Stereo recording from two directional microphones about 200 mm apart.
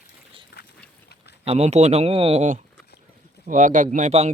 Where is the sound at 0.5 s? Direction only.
55° left (ahead or behind).